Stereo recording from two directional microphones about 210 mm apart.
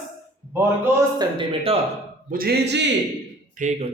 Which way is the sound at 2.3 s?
45° right (ahead or behind).